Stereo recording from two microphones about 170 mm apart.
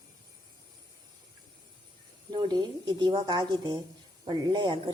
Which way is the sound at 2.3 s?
25° right (ahead or behind).